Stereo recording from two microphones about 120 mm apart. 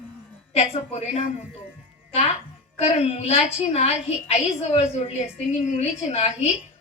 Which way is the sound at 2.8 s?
55° left (ahead or behind).